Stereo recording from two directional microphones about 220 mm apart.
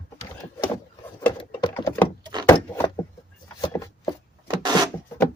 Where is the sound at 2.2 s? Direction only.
20° right (ahead or behind).